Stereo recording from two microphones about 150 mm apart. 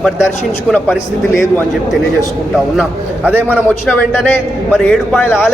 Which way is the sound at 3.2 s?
10° right (ahead or behind).